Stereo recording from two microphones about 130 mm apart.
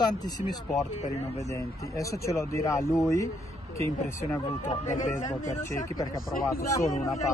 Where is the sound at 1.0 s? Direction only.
60° left (ahead or behind).